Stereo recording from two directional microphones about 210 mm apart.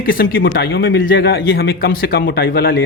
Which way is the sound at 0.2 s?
50° left (ahead or behind).